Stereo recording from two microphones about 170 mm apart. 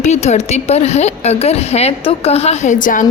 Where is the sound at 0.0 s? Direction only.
40° left (ahead or behind).